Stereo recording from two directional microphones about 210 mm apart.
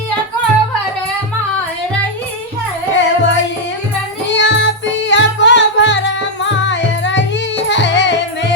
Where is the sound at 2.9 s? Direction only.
60° left (ahead or behind).